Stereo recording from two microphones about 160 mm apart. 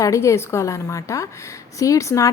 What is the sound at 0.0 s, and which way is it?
A woman's voice, 20° left (ahead or behind).